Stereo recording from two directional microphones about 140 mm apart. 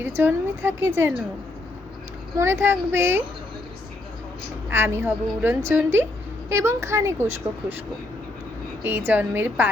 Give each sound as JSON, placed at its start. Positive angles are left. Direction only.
{"t": 0.0, "sound": "a woman's voice", "side_deg": -15}
{"t": 2.4, "sound": "a woman's voice", "side_deg": -15}
{"t": 4.7, "sound": "a woman's voice", "side_deg": -20}
{"t": 8.8, "sound": "a woman's voice", "side_deg": -15}